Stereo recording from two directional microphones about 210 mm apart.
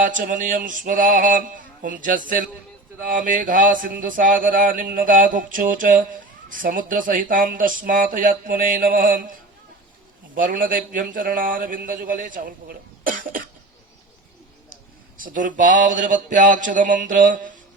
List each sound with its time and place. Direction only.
0.0 s mantra: 40° right (ahead or behind)
15.2 s mantra: 40° right (ahead or behind)